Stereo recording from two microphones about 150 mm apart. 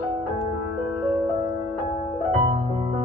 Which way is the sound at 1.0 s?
15° right (ahead or behind).